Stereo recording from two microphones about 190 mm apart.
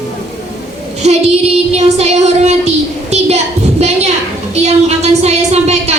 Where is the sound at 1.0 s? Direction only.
35° right (ahead or behind).